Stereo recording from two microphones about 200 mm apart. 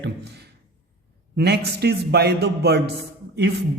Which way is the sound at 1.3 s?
55° right (ahead or behind).